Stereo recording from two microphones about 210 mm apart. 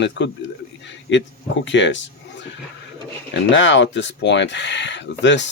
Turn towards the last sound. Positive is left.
turn(degrees=60)  # may be behind; listen again after turning